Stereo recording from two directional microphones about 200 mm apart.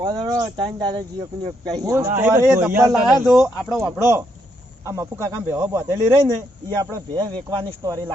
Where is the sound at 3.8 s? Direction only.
15° right (ahead or behind).